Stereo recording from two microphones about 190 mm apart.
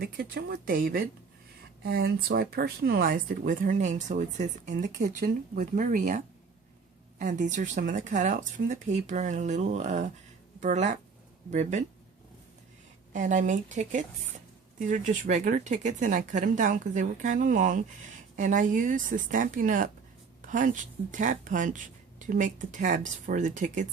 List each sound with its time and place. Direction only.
0.0 s speech: 50° right (ahead or behind)
13.1 s speech: 40° right (ahead or behind)